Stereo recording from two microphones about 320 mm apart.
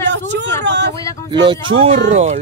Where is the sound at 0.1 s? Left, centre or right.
Right.